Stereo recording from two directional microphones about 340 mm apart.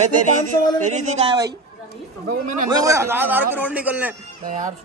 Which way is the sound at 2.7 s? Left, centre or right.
Centre.